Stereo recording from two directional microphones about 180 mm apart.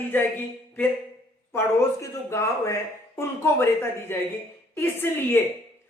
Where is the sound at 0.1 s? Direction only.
10° left (ahead or behind).